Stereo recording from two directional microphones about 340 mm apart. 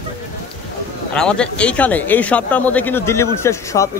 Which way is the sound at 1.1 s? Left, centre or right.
Centre.